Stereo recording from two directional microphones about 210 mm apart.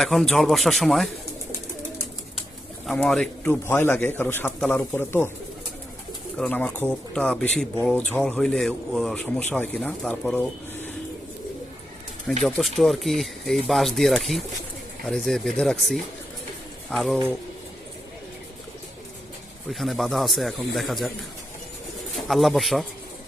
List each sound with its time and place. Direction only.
0.0 s speech: centre (ahead or behind)
2.8 s a man's voice: centre (ahead or behind)
6.3 s speech: 5° left (ahead or behind)
12.4 s speech: centre (ahead or behind)
19.7 s speech: centre (ahead or behind)
22.3 s speech: centre (ahead or behind)